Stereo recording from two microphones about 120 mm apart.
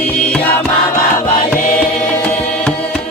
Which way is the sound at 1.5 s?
10° left (ahead or behind).